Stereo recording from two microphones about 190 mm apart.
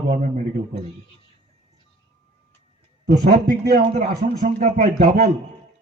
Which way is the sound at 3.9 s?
35° right (ahead or behind).